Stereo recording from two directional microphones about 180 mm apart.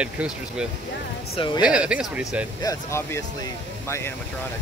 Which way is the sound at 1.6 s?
5° right (ahead or behind).